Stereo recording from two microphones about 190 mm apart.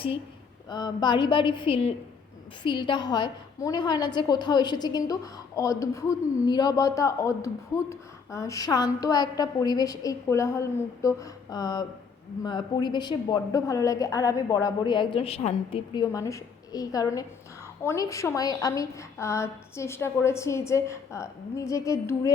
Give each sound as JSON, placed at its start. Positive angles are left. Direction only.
{"t": 0.7, "sound": "a woman's voice", "side_deg": 20}